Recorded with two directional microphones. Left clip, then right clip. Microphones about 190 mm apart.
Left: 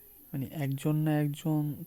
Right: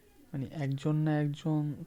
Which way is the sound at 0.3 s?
25° left (ahead or behind).